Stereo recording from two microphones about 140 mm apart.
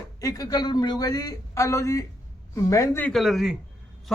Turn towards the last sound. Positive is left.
turn(degrees=0)  # may be behind; listen again after turning